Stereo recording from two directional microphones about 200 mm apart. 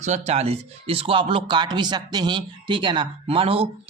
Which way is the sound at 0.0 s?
35° right (ahead or behind).